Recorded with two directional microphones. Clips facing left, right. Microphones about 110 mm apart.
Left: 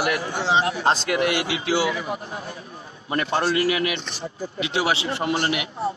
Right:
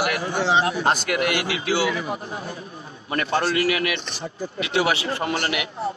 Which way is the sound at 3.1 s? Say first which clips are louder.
Even; 25° left (ahead or behind).